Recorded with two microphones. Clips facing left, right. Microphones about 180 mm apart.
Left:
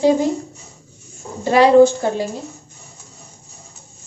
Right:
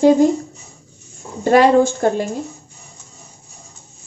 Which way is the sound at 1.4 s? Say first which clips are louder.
Left 1 dB; 50° right (ahead or behind).